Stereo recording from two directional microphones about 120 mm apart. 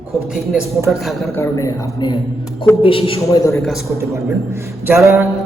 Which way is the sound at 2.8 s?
45° left (ahead or behind).